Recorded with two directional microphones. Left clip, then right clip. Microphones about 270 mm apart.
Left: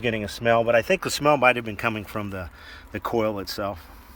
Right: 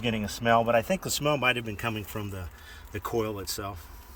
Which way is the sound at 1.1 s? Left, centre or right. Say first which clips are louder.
Left 7 dB; centre.